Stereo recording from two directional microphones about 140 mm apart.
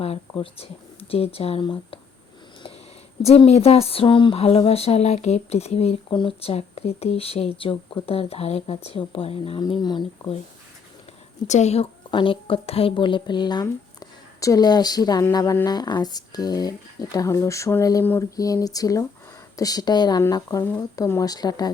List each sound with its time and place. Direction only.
0.0 s speech: 45° left (ahead or behind)
3.2 s speech: 45° left (ahead or behind)
9.6 s speech: 30° left (ahead or behind)
11.4 s speech: 55° left (ahead or behind)
12.1 s speech: 40° left (ahead or behind); by 18.0 s 20° left (ahead or behind)
18.0 s a sound: 15° left (ahead or behind)
18.3 s speech: 25° left (ahead or behind)